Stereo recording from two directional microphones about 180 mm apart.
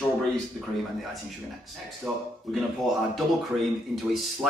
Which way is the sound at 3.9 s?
Centre (ahead or behind).